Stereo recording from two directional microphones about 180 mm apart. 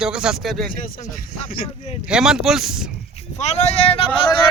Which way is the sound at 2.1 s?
5° right (ahead or behind).